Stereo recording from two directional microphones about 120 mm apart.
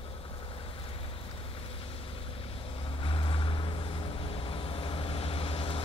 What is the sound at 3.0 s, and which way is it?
Vehicle, 45° left (ahead or behind).